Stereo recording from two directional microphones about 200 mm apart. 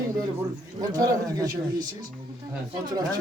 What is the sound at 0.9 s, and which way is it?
Speech, 20° right (ahead or behind).